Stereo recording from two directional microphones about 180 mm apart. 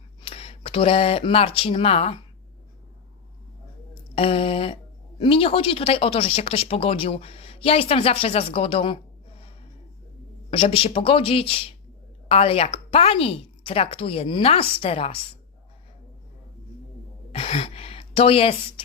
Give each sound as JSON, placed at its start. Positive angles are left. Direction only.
{"t": 0.2, "sound": "speech", "side_deg": 30}
{"t": 4.1, "sound": "speech", "side_deg": 30}
{"t": 10.5, "sound": "speech", "side_deg": 30}
{"t": 17.3, "sound": "speech", "side_deg": 30}